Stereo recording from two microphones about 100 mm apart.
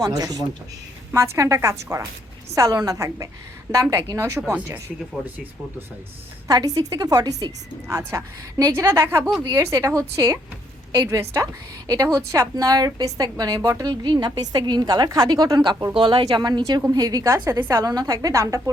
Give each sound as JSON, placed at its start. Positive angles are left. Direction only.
{"t": 0.0, "sound": "a woman's voice", "side_deg": -40}
{"t": 6.5, "sound": "a woman's voice", "side_deg": -40}
{"t": 9.4, "sound": "a woman's voice", "side_deg": -35}
{"t": 16.0, "sound": "a woman's voice", "side_deg": -55}